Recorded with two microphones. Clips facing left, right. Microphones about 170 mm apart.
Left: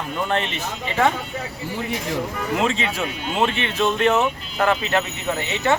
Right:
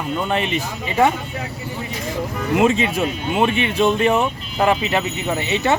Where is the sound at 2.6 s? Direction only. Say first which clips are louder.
Right 7 dB; 15° right (ahead or behind).